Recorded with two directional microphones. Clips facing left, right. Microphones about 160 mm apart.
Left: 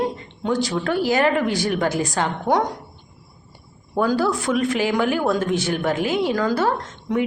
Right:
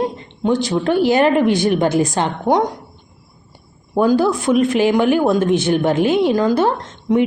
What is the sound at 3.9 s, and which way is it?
Speech, 20° right (ahead or behind).